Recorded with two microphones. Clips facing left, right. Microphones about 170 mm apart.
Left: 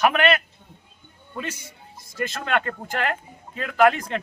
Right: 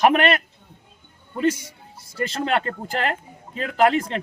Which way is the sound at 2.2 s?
30° right (ahead or behind).